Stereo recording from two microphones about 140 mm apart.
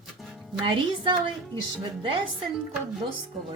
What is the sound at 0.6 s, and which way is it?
Speech, 35° right (ahead or behind).